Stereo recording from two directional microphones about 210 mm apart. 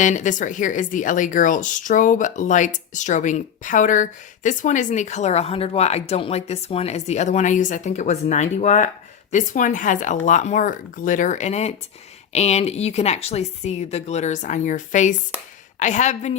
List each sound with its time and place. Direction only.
0.0 s a woman's voice: 35° left (ahead or behind)